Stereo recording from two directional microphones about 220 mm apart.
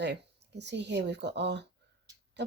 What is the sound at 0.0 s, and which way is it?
Speech, 50° right (ahead or behind).